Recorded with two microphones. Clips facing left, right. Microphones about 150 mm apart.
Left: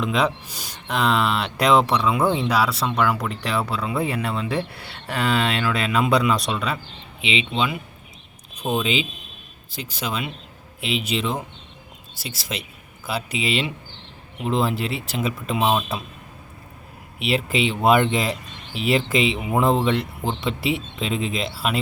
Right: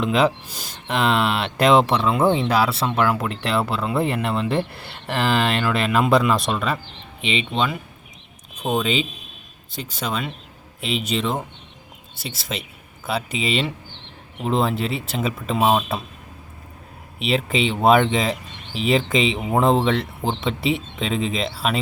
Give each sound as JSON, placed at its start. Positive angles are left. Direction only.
{"t": 0.0, "sound": "speech", "side_deg": 0}
{"t": 7.2, "sound": "speech", "side_deg": -50}
{"t": 7.5, "sound": "speech", "side_deg": 5}
{"t": 8.8, "sound": "speech", "side_deg": 5}
{"t": 17.2, "sound": "speech", "side_deg": 5}